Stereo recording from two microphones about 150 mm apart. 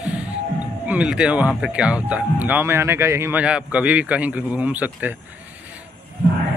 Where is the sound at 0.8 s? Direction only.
10° right (ahead or behind).